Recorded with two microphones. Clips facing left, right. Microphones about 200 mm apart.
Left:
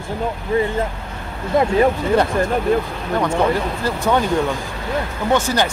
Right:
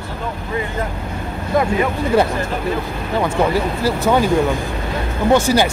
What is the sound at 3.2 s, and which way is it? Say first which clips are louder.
Speech: right 1 dB; 5° right (ahead or behind).